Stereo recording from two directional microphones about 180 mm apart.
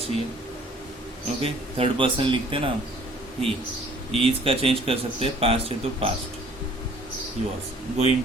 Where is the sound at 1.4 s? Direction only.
30° right (ahead or behind).